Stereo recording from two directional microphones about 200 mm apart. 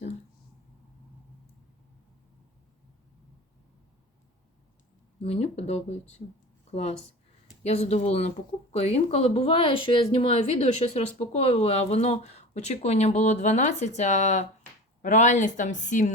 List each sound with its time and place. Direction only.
5.2 s a woman's voice: 30° left (ahead or behind)